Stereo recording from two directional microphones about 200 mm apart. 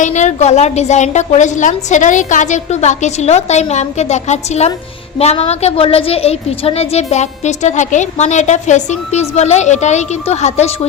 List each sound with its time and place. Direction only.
0.0 s a woman's voice: 35° left (ahead or behind)